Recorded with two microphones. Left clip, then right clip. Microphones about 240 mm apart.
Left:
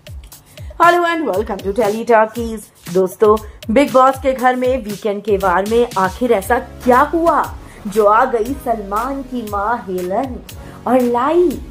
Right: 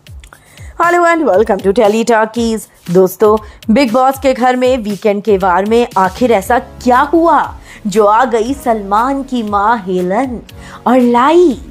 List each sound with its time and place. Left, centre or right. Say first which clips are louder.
0.8 s a woman's voice: right 3 dB; right